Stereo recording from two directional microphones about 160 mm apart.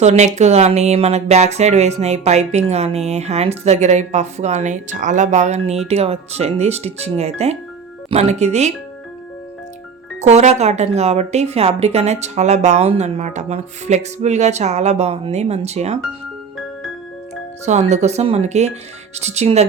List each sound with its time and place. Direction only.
0.0 s speech: 45° right (ahead or behind)
10.2 s speech: 45° right (ahead or behind)
17.7 s speech: 45° right (ahead or behind)